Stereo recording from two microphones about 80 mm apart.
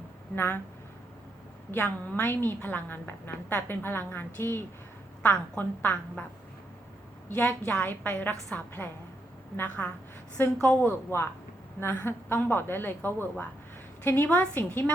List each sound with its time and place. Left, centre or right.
0.3 s a woman's voice: left
2.0 s a woman's voice: left
7.3 s a woman's voice: left